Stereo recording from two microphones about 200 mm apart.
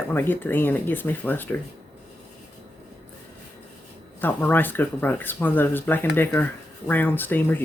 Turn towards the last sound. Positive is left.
turn(degrees=10)  # may be behind; listen again after turning